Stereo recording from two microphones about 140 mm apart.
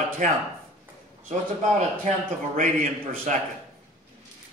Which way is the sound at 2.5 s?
65° right (ahead or behind).